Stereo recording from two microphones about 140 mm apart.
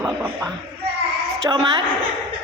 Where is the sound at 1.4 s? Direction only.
30° right (ahead or behind).